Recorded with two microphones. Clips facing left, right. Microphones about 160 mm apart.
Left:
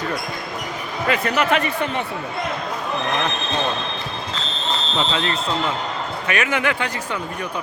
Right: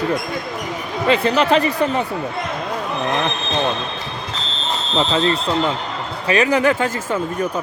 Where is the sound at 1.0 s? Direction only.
30° right (ahead or behind).